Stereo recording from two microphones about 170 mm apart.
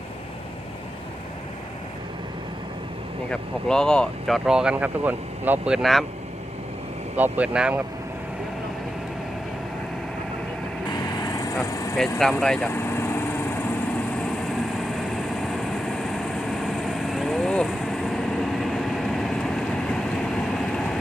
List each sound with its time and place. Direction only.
3.7 s speech: 5° left (ahead or behind)
7.2 s speech: 10° right (ahead or behind)
10.9 s vehicle: 20° left (ahead or behind)
12.2 s vehicle: 5° left (ahead or behind)